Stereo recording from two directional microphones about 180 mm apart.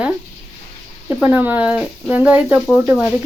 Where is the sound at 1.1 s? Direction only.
10° right (ahead or behind).